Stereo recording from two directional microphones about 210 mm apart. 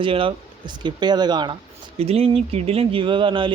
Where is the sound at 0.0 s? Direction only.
25° right (ahead or behind).